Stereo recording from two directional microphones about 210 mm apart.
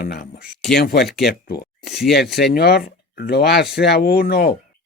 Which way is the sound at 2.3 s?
50° left (ahead or behind).